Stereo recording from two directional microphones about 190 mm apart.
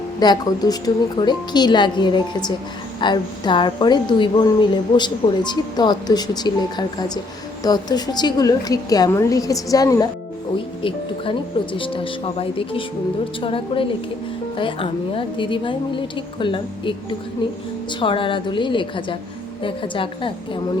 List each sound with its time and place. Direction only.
0.2 s a woman's voice: 20° left (ahead or behind)